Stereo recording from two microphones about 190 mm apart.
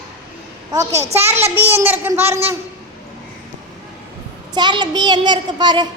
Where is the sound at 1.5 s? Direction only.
10° right (ahead or behind).